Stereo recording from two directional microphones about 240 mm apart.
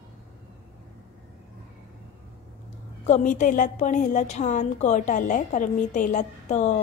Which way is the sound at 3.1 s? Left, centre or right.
Left.